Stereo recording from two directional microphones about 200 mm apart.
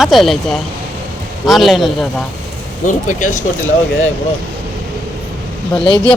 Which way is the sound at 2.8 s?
40° left (ahead or behind).